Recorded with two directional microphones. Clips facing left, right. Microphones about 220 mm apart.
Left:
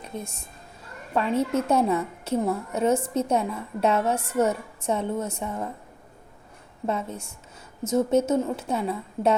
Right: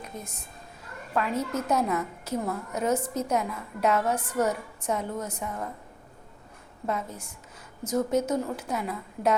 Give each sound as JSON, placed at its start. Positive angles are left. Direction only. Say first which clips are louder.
{"t": 0.0, "sound": "a woman's voice", "louder": "left 4 dB", "side_deg": 30}
{"t": 6.8, "sound": "a woman's voice", "louder": "left 3 dB", "side_deg": 25}